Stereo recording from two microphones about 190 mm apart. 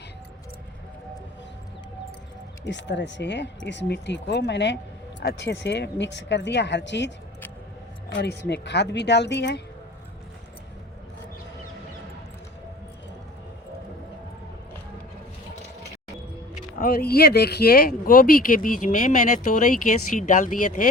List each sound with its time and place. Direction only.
2.6 s speech: 70° left (ahead or behind)
8.1 s speech: 65° left (ahead or behind)
16.6 s speech: 50° left (ahead or behind)